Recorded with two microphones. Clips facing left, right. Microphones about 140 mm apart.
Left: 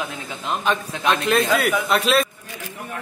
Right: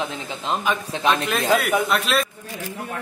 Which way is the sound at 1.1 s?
Centre (ahead or behind).